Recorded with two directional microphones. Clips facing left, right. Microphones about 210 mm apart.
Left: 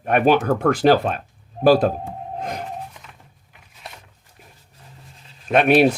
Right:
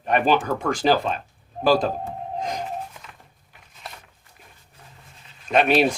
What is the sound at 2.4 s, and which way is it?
Music, 55° left (ahead or behind).